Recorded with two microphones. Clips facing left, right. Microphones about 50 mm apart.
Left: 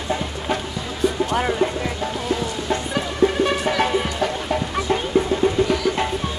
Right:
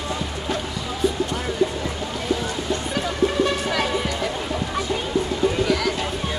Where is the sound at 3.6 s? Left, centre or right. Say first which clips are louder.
Left 3 dB; left.